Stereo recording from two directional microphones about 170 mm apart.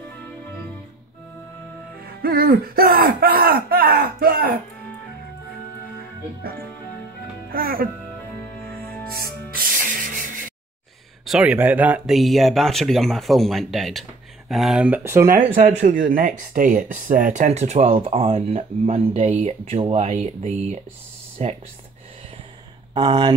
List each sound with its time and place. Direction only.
2.2 s speech: 60° right (ahead or behind)
7.5 s speech: 60° right (ahead or behind)
8.4 s music: 15° left (ahead or behind)
9.5 s rub: 55° right (ahead or behind)
11.2 s speech: 5° right (ahead or behind)
15.5 s speech: 50° right (ahead or behind)
22.9 s speech: 25° right (ahead or behind)